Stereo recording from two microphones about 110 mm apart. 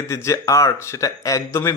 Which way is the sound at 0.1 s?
30° left (ahead or behind).